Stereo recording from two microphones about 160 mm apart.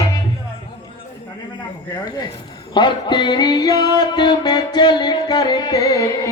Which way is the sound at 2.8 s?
30° left (ahead or behind).